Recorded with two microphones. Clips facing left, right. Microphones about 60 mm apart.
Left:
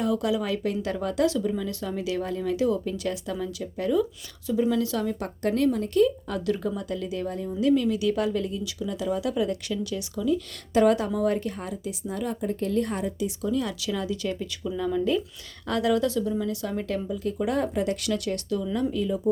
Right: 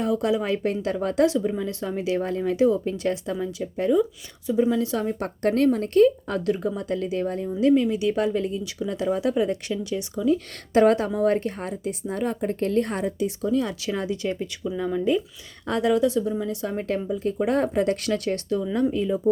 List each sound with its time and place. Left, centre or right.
0.0 s speech: right
1.3 s speech: right
5.4 s speech: right
6.5 s speech: right
7.6 s speech: right
10.2 s speech: right
14.6 s speech: centre